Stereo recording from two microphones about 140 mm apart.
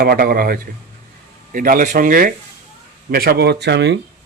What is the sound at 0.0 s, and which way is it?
Speech, 90° right.